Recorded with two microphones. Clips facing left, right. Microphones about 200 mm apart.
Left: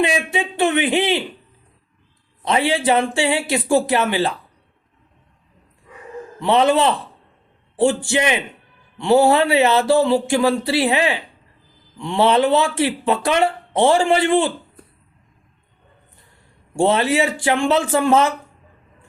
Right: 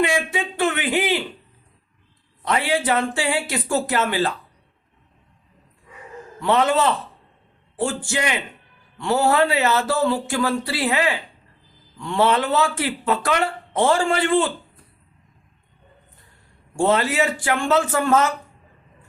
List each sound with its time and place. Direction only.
0.0 s speech: 20° left (ahead or behind)
2.4 s speech: 25° left (ahead or behind)
6.4 s speech: 20° left (ahead or behind)
16.8 s speech: 25° left (ahead or behind)